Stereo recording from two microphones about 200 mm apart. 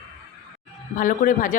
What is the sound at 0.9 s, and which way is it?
Speech, 40° left (ahead or behind).